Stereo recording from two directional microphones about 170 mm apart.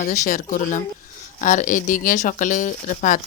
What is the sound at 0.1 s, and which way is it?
Speech, 45° left (ahead or behind).